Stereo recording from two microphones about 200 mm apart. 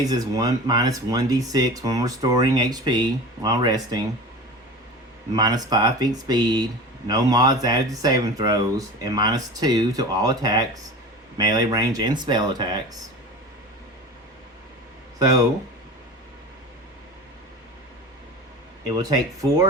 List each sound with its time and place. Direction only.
0.0 s speech: 20° right (ahead or behind)
5.3 s speech: 20° right (ahead or behind)
18.9 s speech: 20° right (ahead or behind)